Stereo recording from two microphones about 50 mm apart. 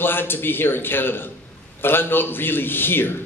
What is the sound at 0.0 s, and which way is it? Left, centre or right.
A man's voice, left.